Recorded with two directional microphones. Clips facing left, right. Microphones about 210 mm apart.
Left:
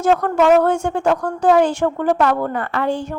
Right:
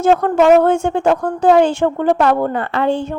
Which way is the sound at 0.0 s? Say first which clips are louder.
Right 3 dB; 25° right (ahead or behind).